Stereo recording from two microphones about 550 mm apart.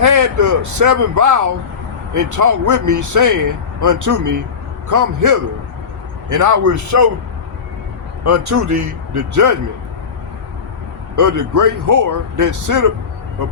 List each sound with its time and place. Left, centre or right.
0.0 s a man's voice: right
8.2 s speech: right
11.1 s a man's voice: right